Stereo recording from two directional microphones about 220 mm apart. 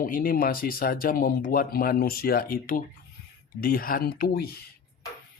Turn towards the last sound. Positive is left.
turn(degrees=45)  # may be behind; listen again after turning